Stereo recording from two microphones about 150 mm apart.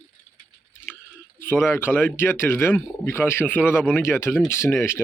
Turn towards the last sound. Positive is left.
turn(degrees=15)  # may be behind; listen again after turning